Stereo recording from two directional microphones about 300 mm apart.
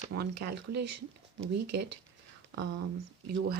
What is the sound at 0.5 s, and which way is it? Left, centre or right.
Speech, right.